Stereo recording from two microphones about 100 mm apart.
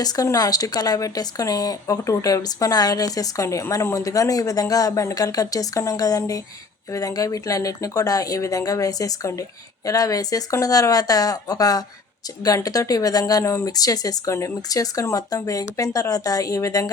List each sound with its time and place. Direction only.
0.0 s speech: 40° left (ahead or behind)